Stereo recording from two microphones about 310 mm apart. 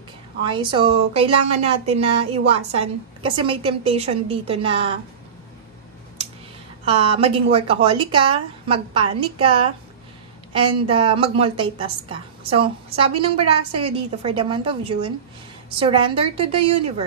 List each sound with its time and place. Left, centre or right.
0.4 s a woman's voice: centre
6.9 s a woman's voice: centre
10.9 s a woman's voice: centre